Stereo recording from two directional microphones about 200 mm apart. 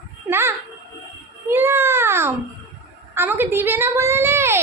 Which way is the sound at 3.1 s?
10° right (ahead or behind).